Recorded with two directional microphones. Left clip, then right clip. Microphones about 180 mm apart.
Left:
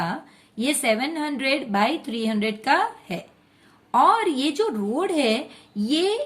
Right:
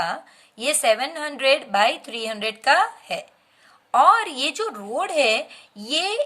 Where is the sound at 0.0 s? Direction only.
30° right (ahead or behind).